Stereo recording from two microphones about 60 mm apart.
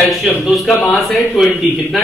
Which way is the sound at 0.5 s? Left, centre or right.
Centre.